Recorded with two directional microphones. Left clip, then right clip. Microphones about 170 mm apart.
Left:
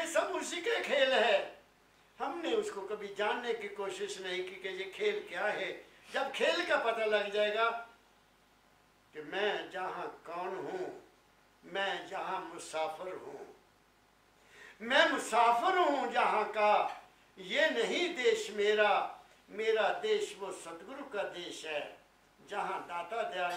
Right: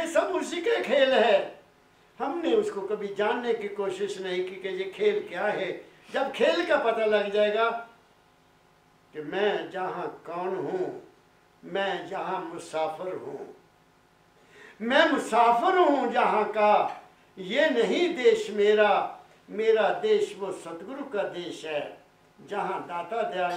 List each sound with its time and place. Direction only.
0.2 s speech: 10° right (ahead or behind)
3.0 s speech: 10° right (ahead or behind)
9.1 s speech: 15° right (ahead or behind)
14.8 s speech: 10° right (ahead or behind)